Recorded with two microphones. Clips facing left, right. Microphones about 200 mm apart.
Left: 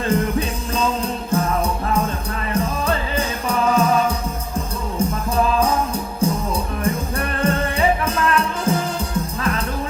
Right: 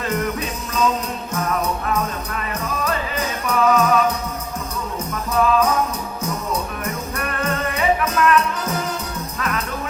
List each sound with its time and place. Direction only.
0.1 s music: 30° left (ahead or behind)
2.5 s music: 30° left (ahead or behind)